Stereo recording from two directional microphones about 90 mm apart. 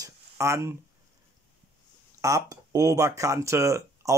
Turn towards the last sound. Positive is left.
turn(degrees=-30)  # may be behind; listen again after turning